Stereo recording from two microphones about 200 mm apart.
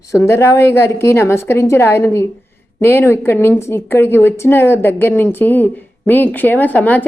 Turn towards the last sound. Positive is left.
turn(degrees=10)  # may be behind; listen again after turning